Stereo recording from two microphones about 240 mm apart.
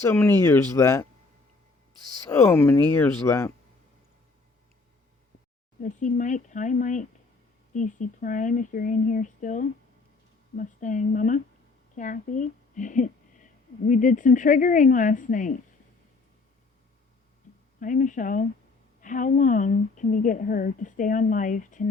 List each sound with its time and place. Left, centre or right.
0.0 s speech: centre
2.3 s speech: centre
5.8 s speech: left
17.7 s speech: left